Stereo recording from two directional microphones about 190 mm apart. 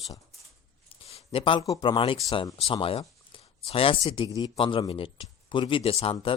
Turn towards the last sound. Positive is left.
turn(degrees=30)  # may be behind; listen again after turning